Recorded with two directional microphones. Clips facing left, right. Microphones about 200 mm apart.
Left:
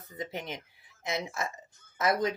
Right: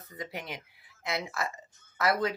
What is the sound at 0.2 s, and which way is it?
Speech, 20° left (ahead or behind).